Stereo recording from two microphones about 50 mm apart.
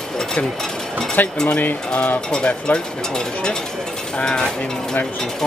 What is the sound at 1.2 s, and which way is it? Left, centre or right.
Speech, left.